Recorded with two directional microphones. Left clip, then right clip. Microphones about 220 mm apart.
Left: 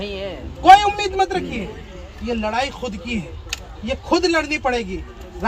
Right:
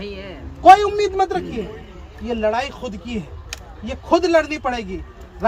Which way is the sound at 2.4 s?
5° right (ahead or behind).